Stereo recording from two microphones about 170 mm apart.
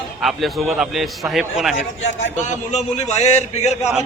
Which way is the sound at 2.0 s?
40° left (ahead or behind).